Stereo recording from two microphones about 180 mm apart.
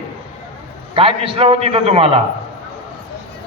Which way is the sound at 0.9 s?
30° right (ahead or behind).